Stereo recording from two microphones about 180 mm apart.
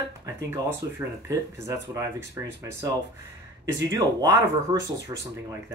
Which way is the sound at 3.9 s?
20° right (ahead or behind).